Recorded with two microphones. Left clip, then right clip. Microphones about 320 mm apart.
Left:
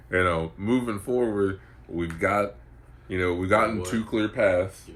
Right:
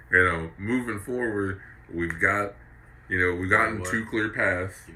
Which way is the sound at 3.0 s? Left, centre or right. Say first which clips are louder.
Right 1 dB; centre.